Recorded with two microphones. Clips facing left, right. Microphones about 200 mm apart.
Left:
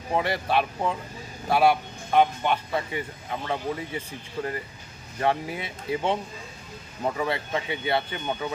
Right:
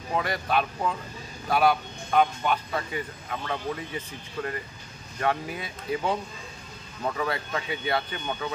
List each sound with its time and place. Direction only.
0.1 s speech: 25° left (ahead or behind)
7.2 s speech: 25° left (ahead or behind)